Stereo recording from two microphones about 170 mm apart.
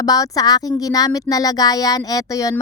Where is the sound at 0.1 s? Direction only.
20° left (ahead or behind).